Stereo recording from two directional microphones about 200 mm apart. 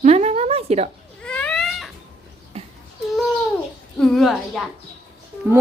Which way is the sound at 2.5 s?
30° right (ahead or behind).